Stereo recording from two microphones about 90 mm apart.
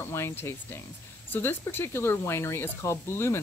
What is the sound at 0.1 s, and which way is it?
Speech, 30° left (ahead or behind).